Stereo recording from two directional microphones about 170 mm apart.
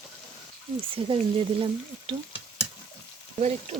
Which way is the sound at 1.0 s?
30° right (ahead or behind).